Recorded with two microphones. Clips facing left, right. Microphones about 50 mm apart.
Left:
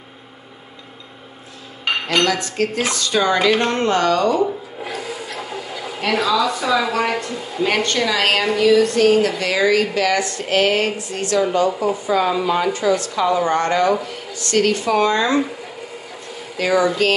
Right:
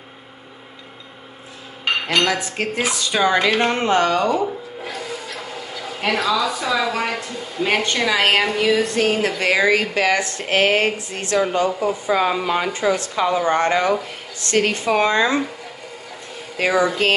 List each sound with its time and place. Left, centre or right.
2.2 s speech: centre
4.8 s a sound: centre
5.9 s a woman's voice: centre; by 15.3 s right
16.5 s speech: right